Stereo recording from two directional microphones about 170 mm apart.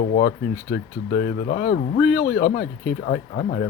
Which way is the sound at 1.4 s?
60° left (ahead or behind).